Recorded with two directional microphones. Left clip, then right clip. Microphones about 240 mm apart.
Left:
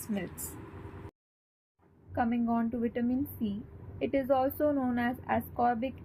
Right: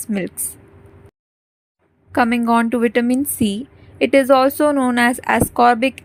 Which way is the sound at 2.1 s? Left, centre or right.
Right.